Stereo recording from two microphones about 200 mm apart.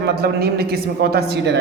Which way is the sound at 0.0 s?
50° right (ahead or behind).